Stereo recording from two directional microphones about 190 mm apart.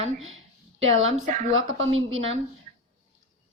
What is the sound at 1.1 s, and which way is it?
Speech, 45° right (ahead or behind).